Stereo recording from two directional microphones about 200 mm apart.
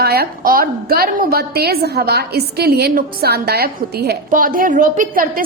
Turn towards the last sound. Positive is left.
turn(degrees=-45)  # may be behind; listen again after turning